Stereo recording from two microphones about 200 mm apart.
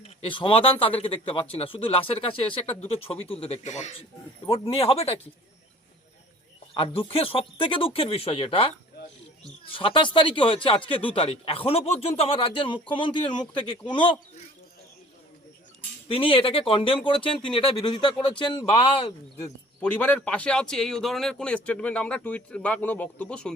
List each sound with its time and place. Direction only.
0.0 s speech: 30° left (ahead or behind)
6.7 s speech: 25° left (ahead or behind)
9.7 s speech: 25° left (ahead or behind)
16.0 s speech: 25° left (ahead or behind)
19.4 s a man's voice: 5° left (ahead or behind)